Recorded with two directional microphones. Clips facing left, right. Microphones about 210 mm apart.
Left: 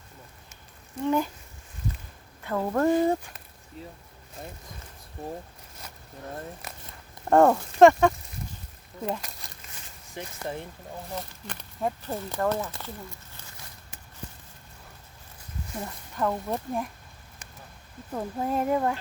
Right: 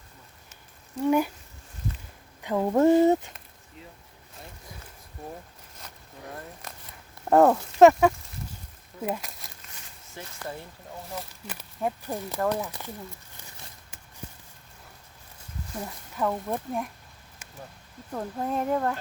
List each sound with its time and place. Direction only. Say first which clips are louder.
1.0 s speech: right 2 dB; 10° right (ahead or behind)
2.4 s speech: right 4 dB; 15° right (ahead or behind)
3.8 s speech: left 5 dB; 35° left (ahead or behind)
7.3 s speech: even; 5° right (ahead or behind)
9.0 s a sound: right 1 dB; 5° right (ahead or behind)
10.2 s speech: left 3 dB; 20° left (ahead or behind)
11.1 s speech: even; 5° right (ahead or behind)
12.5 s speech: even; 15° right (ahead or behind)
16.1 s speech: even; 5° right (ahead or behind)
18.1 s speech: left 1 dB; 5° left (ahead or behind)